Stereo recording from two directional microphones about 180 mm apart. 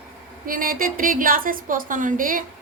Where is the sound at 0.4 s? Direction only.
50° right (ahead or behind).